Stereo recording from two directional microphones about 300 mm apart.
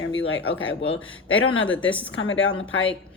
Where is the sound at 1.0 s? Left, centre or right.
Left.